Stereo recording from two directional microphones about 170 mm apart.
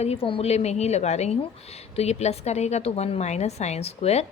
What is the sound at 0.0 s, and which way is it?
A woman's voice, 35° left (ahead or behind).